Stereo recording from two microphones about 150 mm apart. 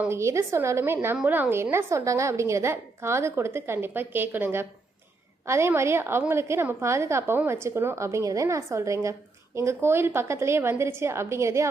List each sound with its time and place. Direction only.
0.0 s a woman's voice: 20° right (ahead or behind)